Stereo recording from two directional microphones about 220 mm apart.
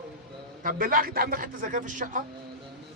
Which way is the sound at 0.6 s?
40° right (ahead or behind).